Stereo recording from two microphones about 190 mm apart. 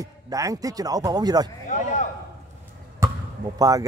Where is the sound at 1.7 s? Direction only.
40° left (ahead or behind).